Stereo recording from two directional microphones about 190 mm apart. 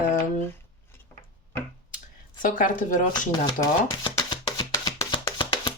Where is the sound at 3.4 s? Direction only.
20° left (ahead or behind).